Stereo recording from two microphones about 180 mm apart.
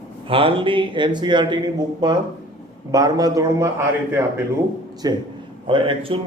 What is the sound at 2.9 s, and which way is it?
Speech, 20° right (ahead or behind).